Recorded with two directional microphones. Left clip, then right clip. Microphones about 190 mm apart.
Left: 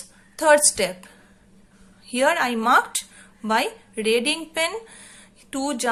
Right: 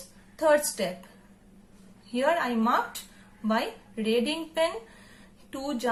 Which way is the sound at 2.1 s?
30° left (ahead or behind).